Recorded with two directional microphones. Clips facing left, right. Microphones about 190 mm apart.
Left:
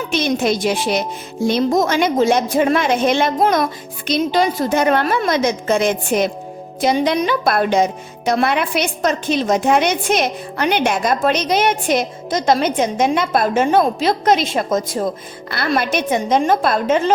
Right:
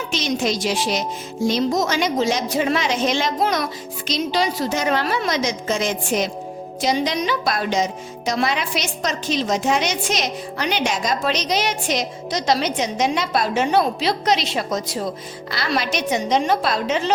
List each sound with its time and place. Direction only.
0.1 s a woman's voice: 55° left (ahead or behind)